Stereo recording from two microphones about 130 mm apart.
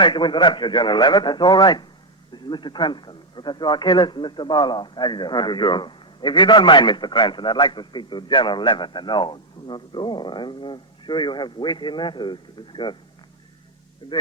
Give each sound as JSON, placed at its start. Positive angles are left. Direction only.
{"t": 0.0, "sound": "a man's voice", "side_deg": 35}
{"t": 14.0, "sound": "a man's voice", "side_deg": 40}